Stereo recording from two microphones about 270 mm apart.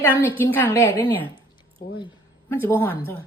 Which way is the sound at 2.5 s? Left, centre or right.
Centre.